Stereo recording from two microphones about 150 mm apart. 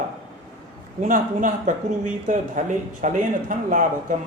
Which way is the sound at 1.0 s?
60° right (ahead or behind).